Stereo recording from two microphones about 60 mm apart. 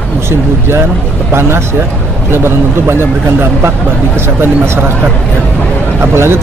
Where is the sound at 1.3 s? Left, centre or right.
Right.